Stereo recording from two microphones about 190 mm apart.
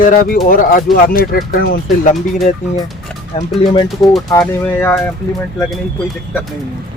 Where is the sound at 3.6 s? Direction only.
30° left (ahead or behind).